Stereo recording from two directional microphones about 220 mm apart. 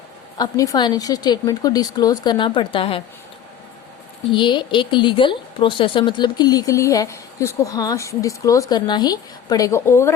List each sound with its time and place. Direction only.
0.3 s a woman's voice: 15° left (ahead or behind)
4.3 s a woman's voice: 20° left (ahead or behind)